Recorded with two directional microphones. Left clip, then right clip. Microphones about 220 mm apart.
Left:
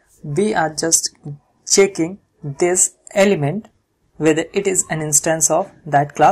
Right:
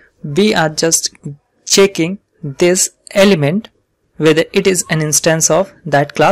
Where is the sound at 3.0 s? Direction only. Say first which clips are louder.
Right 4 dB; 40° right (ahead or behind).